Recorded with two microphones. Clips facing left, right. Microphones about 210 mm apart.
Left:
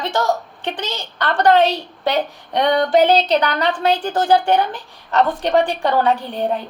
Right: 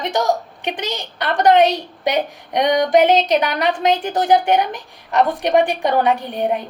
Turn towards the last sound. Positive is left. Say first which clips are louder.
# even
turn(degrees=-15)  # may be behind; listen again after turning